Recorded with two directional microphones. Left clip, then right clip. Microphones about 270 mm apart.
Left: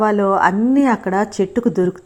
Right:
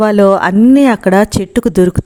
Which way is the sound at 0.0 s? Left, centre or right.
Right.